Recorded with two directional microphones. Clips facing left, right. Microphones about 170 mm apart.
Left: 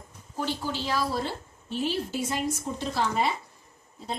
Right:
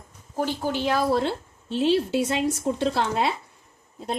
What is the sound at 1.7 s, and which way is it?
Speech, 75° right (ahead or behind).